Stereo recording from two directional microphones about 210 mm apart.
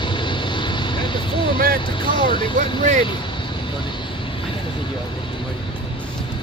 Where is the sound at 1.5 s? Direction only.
45° right (ahead or behind).